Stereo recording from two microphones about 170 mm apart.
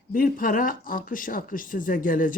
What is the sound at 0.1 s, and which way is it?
Speech, 55° left (ahead or behind).